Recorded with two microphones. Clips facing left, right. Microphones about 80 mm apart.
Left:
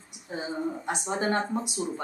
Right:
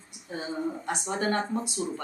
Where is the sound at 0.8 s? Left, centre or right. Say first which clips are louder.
Left 1 dB; centre.